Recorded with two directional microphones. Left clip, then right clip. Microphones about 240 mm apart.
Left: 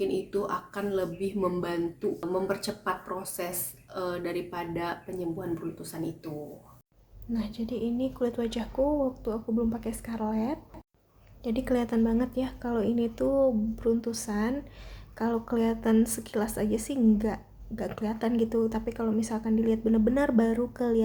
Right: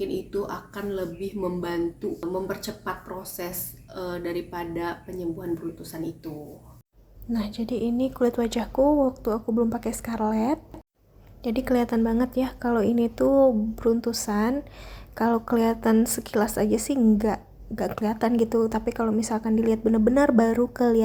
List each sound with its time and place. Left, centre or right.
0.0 s speech: centre
7.3 s a woman's voice: centre